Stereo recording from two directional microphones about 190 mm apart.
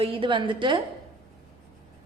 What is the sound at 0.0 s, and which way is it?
Speech, 25° right (ahead or behind).